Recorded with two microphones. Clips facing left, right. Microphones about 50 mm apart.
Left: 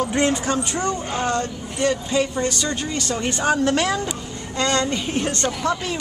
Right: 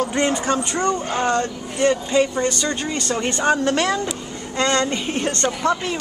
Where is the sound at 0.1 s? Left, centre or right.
Centre.